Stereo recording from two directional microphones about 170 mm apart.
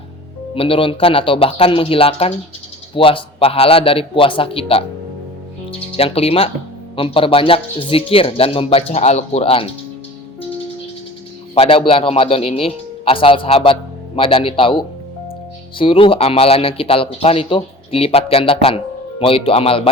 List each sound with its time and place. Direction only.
0.5 s speech: 35° left (ahead or behind)
6.0 s speech: 35° left (ahead or behind)
11.5 s speech: 35° left (ahead or behind)